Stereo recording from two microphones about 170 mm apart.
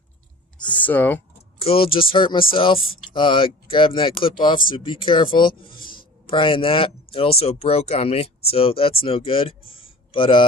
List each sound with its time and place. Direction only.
0.6 s speech: 10° left (ahead or behind)
1.5 s speech: 35° left (ahead or behind)